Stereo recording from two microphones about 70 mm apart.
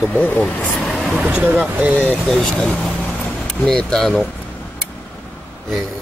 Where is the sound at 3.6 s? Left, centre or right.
Centre.